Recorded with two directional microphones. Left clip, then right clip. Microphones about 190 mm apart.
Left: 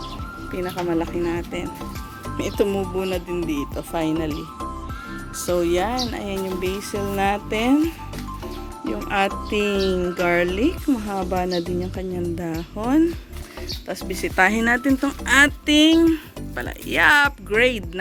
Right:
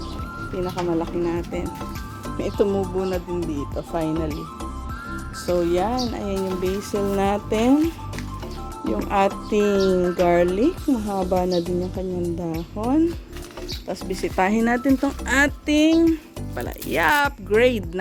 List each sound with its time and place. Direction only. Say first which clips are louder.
0.5 s speech: even; centre (ahead or behind)
5.4 s speech: even; centre (ahead or behind); by 7.8 s 15° right (ahead or behind)
8.8 s speech: right 2 dB; 5° right (ahead or behind)
16.6 s speech: left 3 dB; 10° right (ahead or behind)